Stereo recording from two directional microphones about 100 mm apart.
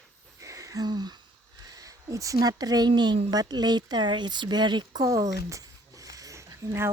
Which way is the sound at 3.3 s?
45° right (ahead or behind).